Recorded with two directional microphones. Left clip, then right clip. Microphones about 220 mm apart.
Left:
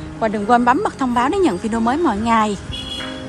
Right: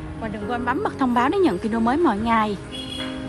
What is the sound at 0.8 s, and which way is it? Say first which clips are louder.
A woman's voice: left 2 dB; centre (ahead or behind).